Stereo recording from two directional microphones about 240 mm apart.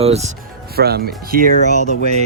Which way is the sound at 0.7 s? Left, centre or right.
Right.